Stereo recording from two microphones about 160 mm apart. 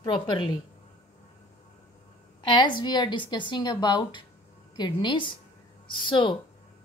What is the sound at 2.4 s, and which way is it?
A woman's voice, 30° left (ahead or behind).